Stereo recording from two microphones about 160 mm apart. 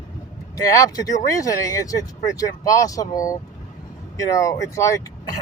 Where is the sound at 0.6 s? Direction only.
20° left (ahead or behind).